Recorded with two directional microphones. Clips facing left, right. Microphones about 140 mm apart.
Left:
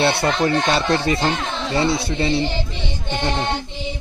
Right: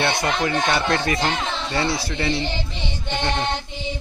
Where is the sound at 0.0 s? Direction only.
30° left (ahead or behind).